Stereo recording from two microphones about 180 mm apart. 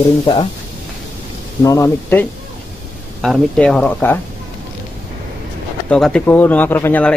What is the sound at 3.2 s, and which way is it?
Speech, 5° left (ahead or behind).